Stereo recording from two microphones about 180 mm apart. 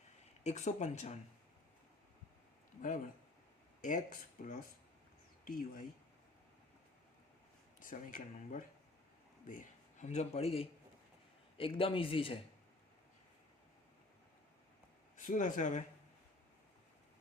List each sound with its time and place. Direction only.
0.4 s speech: 40° left (ahead or behind)
3.8 s speech: 45° left (ahead or behind)
7.8 s a man's voice: 45° left (ahead or behind); by 12.4 s 30° left (ahead or behind)
15.1 s speech: 45° left (ahead or behind)